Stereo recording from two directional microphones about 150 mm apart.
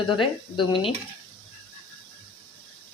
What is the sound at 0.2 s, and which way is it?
Speech, 35° left (ahead or behind).